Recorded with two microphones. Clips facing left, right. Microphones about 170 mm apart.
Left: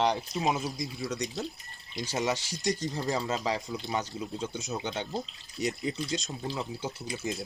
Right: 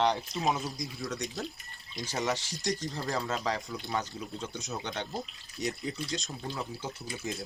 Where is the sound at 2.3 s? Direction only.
Centre (ahead or behind).